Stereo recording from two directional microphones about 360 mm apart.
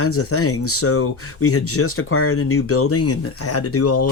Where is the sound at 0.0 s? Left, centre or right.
Left.